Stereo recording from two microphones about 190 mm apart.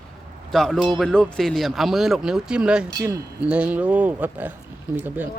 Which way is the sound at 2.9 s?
15° right (ahead or behind).